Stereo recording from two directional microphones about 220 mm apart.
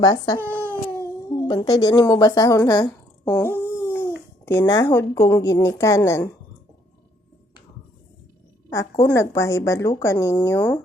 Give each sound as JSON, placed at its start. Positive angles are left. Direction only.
{"t": 0.0, "sound": "a woman's voice", "side_deg": 15}
{"t": 0.4, "sound": "baby cry", "side_deg": -10}
{"t": 0.9, "sound": "a sound", "side_deg": 15}
{"t": 4.4, "sound": "a woman's voice", "side_deg": 15}
{"t": 8.7, "sound": "a woman's voice", "side_deg": 15}